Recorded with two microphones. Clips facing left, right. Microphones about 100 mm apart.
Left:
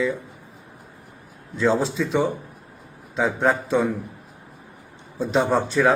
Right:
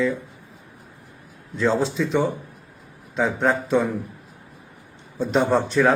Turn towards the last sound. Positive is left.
turn(degrees=0)  # may be behind; listen again after turning